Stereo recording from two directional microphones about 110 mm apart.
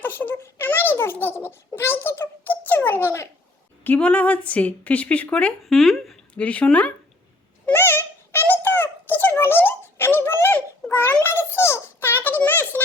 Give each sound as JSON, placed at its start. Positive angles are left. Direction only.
{"t": 0.0, "sound": "a sound", "side_deg": 15}
{"t": 1.5, "sound": "a child's voice", "side_deg": 20}
{"t": 3.8, "sound": "a woman's voice", "side_deg": 10}
{"t": 5.6, "sound": "a woman's voice", "side_deg": 0}
{"t": 6.4, "sound": "a woman's voice", "side_deg": 10}
{"t": 7.7, "sound": "a sound", "side_deg": 20}